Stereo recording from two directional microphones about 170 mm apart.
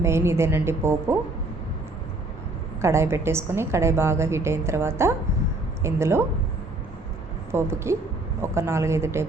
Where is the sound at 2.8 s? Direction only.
15° right (ahead or behind).